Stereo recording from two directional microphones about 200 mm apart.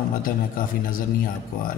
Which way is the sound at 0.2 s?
45° left (ahead or behind).